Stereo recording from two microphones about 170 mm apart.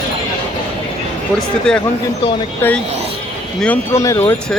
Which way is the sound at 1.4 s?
5° left (ahead or behind).